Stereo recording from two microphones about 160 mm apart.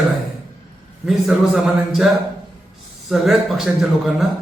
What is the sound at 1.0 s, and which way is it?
A man's voice, centre (ahead or behind).